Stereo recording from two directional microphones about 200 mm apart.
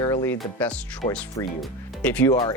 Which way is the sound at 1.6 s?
5° left (ahead or behind).